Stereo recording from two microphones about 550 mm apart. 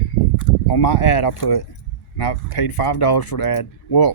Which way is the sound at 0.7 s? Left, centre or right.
Left.